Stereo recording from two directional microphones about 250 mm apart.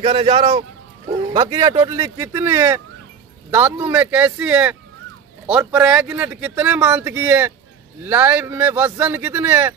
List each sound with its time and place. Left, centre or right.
0.0 s speech: right